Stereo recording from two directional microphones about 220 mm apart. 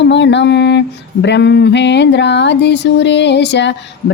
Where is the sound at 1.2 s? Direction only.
50° left (ahead or behind).